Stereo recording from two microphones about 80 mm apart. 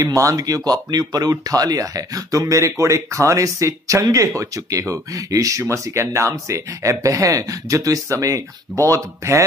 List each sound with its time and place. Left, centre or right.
0.0 s speech: right